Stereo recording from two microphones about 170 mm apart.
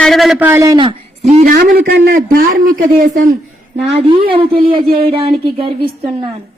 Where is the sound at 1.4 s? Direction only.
55° right (ahead or behind).